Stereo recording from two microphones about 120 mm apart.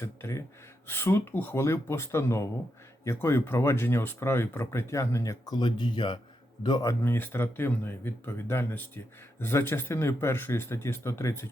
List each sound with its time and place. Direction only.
0.0 s speech: 20° left (ahead or behind)
7.0 s speech: 20° left (ahead or behind)